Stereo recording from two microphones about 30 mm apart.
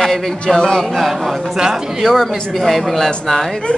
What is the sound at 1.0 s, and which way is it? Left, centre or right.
A man's voice, centre.